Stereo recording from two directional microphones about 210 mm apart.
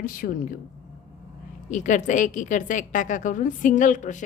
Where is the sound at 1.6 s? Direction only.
35° left (ahead or behind).